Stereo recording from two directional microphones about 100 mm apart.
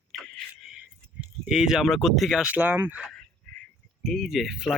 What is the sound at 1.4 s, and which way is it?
Speech, 5° right (ahead or behind).